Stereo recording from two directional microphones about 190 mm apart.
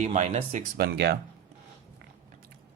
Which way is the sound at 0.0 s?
40° right (ahead or behind).